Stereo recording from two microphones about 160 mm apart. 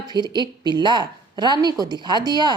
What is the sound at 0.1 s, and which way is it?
A woman's voice, 25° right (ahead or behind).